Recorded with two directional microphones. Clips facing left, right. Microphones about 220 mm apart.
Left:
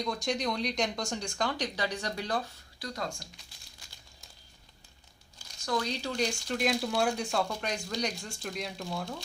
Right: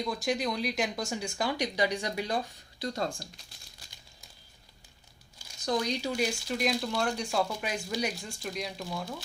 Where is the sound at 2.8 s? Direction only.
30° right (ahead or behind).